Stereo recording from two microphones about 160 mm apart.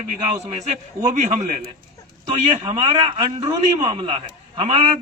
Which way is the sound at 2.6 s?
35° right (ahead or behind).